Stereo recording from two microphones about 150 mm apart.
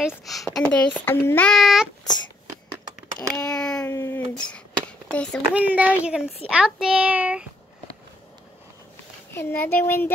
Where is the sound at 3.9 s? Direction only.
15° left (ahead or behind).